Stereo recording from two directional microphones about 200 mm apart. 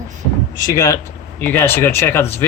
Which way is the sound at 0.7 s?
15° left (ahead or behind).